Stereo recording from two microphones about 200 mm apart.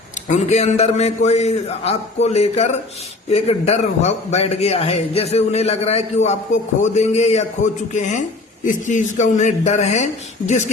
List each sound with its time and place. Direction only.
0.3 s a man's voice: 35° left (ahead or behind)